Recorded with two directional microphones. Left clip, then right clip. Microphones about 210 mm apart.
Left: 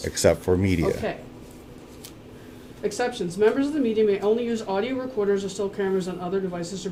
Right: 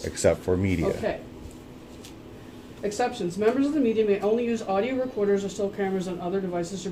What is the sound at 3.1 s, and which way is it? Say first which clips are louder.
Speech: left 3 dB; 40° left (ahead or behind).